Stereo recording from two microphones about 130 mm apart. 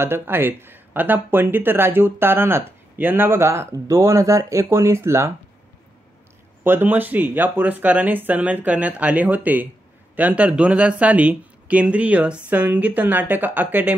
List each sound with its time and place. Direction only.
0.0 s speech: 15° right (ahead or behind)
6.6 s speech: 15° right (ahead or behind)